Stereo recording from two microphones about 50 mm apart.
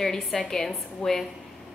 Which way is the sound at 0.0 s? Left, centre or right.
Centre.